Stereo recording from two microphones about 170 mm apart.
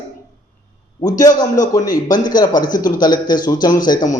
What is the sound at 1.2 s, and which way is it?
A man's voice, 20° left (ahead or behind).